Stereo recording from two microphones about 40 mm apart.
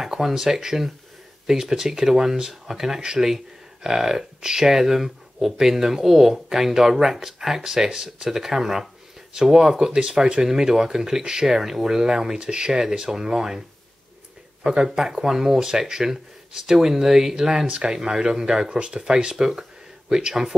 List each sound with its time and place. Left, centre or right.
0.0 s speech: centre